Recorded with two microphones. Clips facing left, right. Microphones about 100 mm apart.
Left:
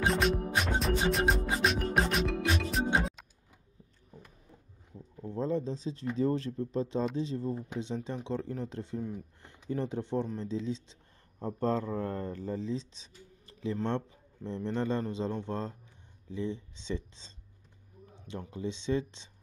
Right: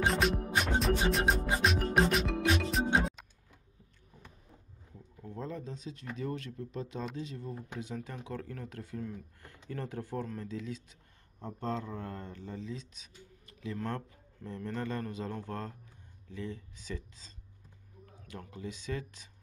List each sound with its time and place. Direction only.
0.0 s music: centre (ahead or behind)
5.2 s speech: 30° left (ahead or behind)
11.4 s speech: 40° left (ahead or behind)